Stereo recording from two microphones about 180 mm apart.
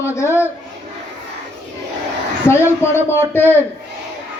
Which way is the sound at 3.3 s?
10° left (ahead or behind).